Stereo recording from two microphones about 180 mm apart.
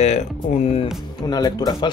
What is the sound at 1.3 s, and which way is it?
Speech, 20° left (ahead or behind).